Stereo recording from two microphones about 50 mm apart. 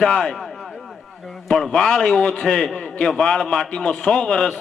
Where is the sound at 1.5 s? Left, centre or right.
Centre.